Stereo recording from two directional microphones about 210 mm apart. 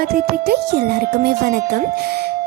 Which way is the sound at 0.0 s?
45° right (ahead or behind).